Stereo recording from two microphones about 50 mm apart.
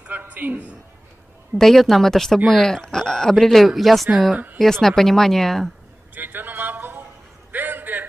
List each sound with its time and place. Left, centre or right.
0.1 s a man's voice: right
1.6 s speech: centre
6.1 s a sound: right